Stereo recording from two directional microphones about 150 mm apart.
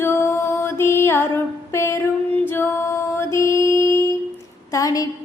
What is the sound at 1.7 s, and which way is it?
Female singing, 15° left (ahead or behind).